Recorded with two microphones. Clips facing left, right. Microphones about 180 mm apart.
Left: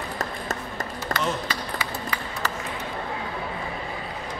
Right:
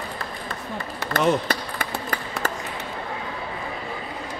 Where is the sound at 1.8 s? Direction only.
60° right (ahead or behind).